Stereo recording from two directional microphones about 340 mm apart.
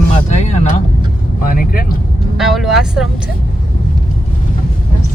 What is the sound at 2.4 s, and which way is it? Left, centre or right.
Speech, centre.